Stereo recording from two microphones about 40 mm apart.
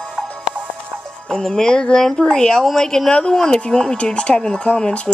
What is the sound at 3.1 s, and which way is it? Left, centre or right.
Speech, left.